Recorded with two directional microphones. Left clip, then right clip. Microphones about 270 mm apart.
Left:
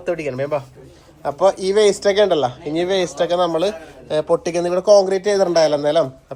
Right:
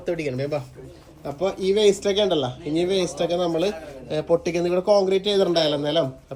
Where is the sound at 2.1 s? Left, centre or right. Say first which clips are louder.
Left 6 dB; left.